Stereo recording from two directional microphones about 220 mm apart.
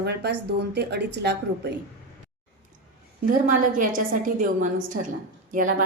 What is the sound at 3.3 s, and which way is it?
A woman's voice, 40° right (ahead or behind).